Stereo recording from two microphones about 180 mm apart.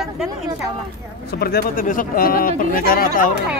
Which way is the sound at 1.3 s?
60° left (ahead or behind).